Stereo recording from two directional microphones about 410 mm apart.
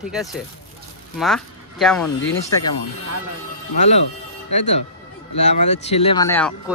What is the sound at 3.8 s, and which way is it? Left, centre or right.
Speech, centre.